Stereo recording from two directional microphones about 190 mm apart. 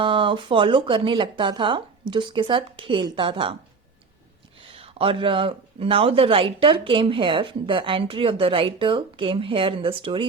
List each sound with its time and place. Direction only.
0.0 s speech: 25° right (ahead or behind)
4.7 s speech: 30° right (ahead or behind)